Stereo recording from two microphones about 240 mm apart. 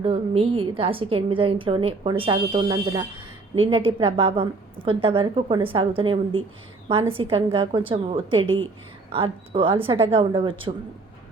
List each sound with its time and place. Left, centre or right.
0.0 s a woman's voice: right